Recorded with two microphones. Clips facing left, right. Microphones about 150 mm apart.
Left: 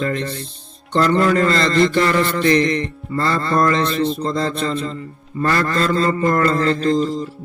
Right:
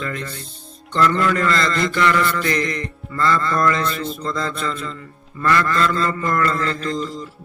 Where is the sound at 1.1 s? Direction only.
35° left (ahead or behind).